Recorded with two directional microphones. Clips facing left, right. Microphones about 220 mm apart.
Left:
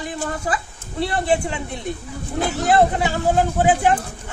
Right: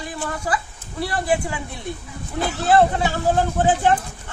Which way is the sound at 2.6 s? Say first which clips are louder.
Right 1 dB; 15° left (ahead or behind).